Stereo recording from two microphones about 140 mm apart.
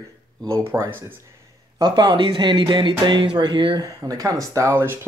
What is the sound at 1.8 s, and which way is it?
Speech, 30° right (ahead or behind).